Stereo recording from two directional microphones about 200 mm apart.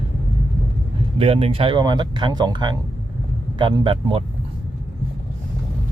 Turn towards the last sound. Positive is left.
turn(degrees=-25)  # may be behind; listen again after turning